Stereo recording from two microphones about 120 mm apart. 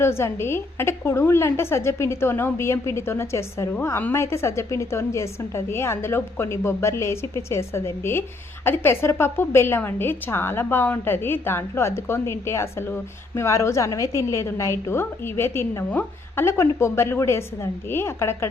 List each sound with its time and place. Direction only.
0.0 s a woman's voice: 20° left (ahead or behind)